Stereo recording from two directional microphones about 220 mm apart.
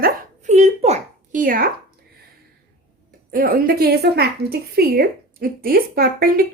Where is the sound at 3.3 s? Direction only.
40° right (ahead or behind).